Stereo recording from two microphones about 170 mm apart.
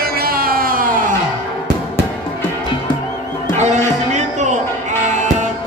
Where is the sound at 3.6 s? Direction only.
45° right (ahead or behind).